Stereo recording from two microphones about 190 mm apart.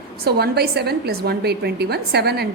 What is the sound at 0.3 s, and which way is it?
A woman's voice, 55° right (ahead or behind).